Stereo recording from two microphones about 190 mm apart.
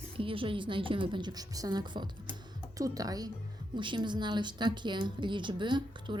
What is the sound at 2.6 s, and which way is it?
Speech, 20° right (ahead or behind).